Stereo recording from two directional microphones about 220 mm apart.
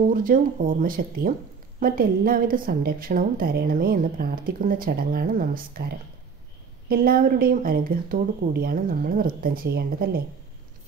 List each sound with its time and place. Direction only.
0.1 s a woman's voice: 40° right (ahead or behind)